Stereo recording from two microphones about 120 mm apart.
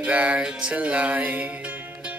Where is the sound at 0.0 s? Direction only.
10° right (ahead or behind).